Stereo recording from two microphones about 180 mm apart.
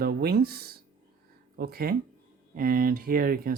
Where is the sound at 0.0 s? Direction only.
60° right (ahead or behind).